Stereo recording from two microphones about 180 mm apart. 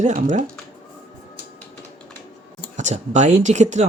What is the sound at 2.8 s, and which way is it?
Speech, 40° right (ahead or behind).